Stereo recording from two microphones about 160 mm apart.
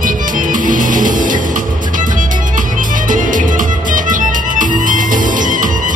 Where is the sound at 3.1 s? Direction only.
55° right (ahead or behind).